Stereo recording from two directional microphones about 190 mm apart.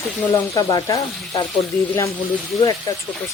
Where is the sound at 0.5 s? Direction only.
20° left (ahead or behind).